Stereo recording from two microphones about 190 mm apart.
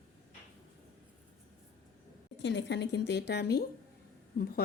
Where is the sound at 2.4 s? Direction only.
70° left (ahead or behind).